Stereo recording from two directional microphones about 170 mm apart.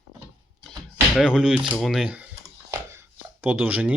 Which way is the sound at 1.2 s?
5° right (ahead or behind).